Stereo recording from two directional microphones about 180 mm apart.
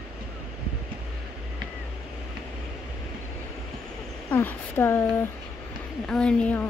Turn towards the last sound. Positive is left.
turn(degrees=5)  # may be behind; listen again after turning